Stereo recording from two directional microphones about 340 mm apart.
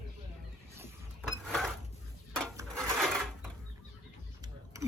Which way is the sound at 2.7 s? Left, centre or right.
Centre.